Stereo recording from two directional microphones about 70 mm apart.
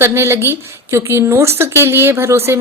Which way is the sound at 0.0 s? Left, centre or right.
Right.